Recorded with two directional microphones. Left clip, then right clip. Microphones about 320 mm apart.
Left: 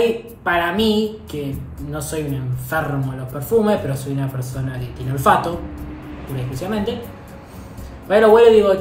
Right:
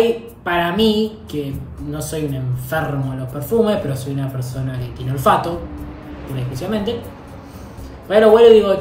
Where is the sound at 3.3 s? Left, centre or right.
Centre.